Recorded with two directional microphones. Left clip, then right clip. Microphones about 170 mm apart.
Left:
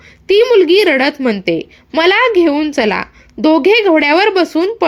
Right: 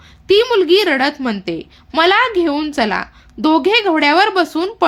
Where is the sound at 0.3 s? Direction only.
15° left (ahead or behind).